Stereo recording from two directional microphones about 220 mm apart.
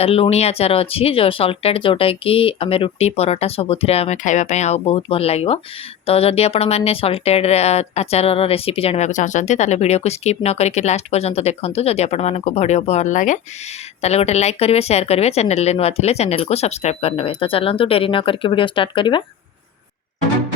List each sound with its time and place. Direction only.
0.0 s speech: 25° left (ahead or behind)